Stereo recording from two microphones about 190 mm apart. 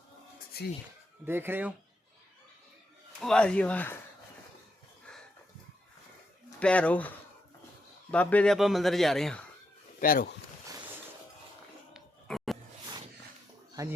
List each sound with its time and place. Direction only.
0.5 s speech: 55° left (ahead or behind)
1.2 s speech: 10° right (ahead or behind)
3.2 s speech: 5° left (ahead or behind)
6.6 s speech: 5° left (ahead or behind)
8.1 s speech: 5° left (ahead or behind)
10.0 s speech: 45° left (ahead or behind)
11.9 s a sound: centre (ahead or behind)
13.8 s speech: 20° right (ahead or behind)